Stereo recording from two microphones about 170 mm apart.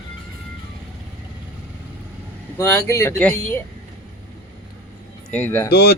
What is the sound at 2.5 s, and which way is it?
Speech, 15° left (ahead or behind).